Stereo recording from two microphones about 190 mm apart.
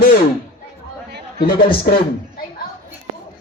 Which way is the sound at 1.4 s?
50° left (ahead or behind).